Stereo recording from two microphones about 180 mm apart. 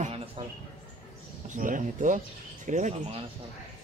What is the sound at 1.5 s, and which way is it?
Speech, 45° right (ahead or behind).